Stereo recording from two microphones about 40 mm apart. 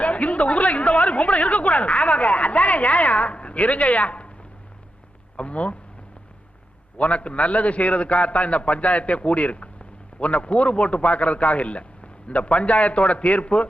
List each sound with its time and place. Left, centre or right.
0.0 s a man's voice: left
5.4 s speech: left
7.0 s a man's voice: left